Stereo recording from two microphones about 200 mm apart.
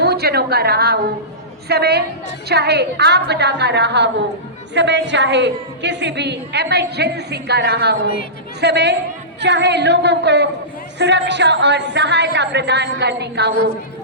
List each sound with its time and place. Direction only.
0.0 s a woman's voice: 55° right (ahead or behind)